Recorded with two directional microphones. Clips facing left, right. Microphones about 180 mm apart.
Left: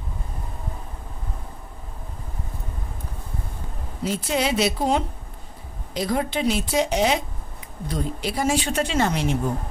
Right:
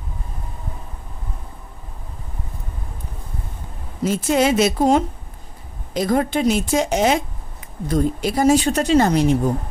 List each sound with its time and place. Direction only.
4.0 s a woman's voice: 45° right (ahead or behind)